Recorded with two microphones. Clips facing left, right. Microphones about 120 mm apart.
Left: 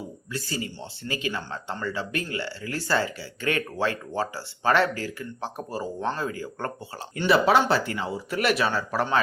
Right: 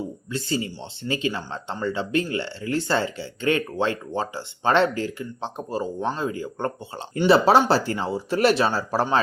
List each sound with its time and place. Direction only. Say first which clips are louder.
0.3 s speech: right 4 dB; 25° right (ahead or behind)